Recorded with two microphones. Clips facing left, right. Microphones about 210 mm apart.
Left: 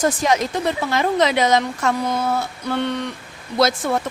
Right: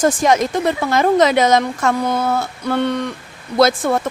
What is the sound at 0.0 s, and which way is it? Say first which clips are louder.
Speech: right 4 dB; 45° right (ahead or behind).